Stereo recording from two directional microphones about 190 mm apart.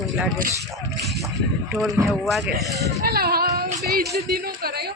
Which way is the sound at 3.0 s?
50° right (ahead or behind).